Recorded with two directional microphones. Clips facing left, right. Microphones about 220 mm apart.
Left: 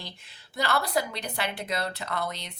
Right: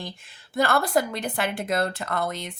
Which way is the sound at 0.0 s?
50° right (ahead or behind).